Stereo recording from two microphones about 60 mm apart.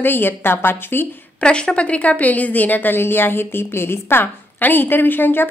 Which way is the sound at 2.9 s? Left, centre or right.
Left.